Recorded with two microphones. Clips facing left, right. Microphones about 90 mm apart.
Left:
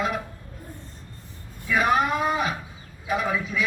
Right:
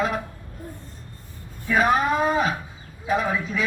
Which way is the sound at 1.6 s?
35° right (ahead or behind).